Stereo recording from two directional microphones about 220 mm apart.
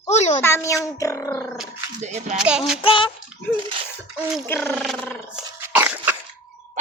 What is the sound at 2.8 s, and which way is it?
Speech, 25° left (ahead or behind).